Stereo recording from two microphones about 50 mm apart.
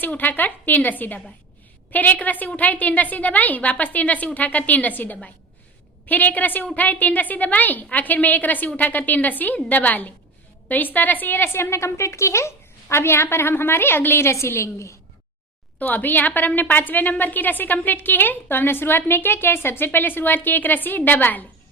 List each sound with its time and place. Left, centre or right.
0.0 s a woman's voice: left
15.8 s a woman's voice: left